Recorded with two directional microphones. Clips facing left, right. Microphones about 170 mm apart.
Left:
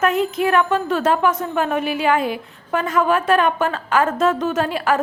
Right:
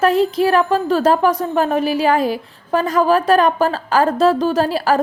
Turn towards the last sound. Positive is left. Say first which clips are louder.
# right 3 dB
turn(degrees=-35)  # may be behind; listen again after turning